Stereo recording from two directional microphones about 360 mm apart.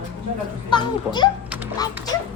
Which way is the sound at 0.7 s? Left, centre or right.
Centre.